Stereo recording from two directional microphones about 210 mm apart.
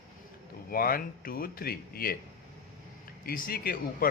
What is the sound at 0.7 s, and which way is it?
Speech, 45° left (ahead or behind).